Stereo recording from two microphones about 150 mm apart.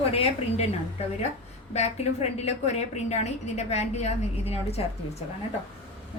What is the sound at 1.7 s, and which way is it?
A woman's voice, 45° left (ahead or behind).